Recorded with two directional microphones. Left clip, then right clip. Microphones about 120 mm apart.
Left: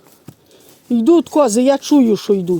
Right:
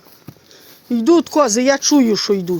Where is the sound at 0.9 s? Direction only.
70° left (ahead or behind).